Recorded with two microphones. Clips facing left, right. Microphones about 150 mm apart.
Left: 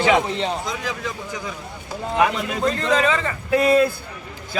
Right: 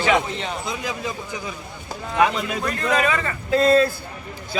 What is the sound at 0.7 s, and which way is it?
Speech, 10° right (ahead or behind).